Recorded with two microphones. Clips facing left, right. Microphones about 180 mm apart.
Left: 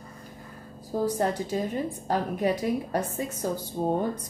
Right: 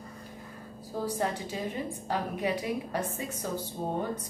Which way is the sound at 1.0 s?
45° left (ahead or behind).